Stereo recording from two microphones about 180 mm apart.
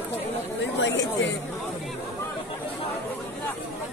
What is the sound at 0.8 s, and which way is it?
Speech, 80° left.